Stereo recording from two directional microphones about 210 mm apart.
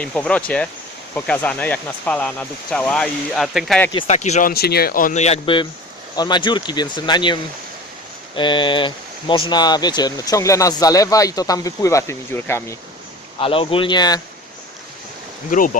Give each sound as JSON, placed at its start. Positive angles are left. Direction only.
{"t": 0.0, "sound": "speech", "side_deg": 5}
{"t": 4.0, "sound": "speech", "side_deg": 35}
{"t": 8.4, "sound": "speech", "side_deg": 25}
{"t": 13.4, "sound": "speech", "side_deg": 25}
{"t": 15.4, "sound": "speech", "side_deg": 40}